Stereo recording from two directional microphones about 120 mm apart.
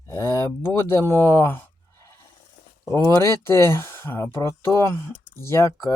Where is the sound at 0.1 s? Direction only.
25° left (ahead or behind).